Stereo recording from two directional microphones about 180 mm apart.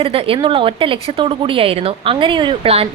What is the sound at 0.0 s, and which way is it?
A woman's voice, 30° right (ahead or behind).